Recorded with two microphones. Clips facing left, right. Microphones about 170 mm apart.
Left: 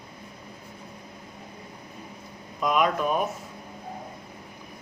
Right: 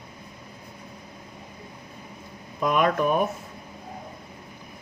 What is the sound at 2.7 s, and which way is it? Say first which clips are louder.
Speech: right 2 dB; 55° right (ahead or behind).